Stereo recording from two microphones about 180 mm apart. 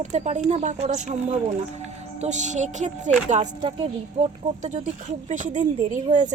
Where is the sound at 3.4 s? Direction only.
25° right (ahead or behind).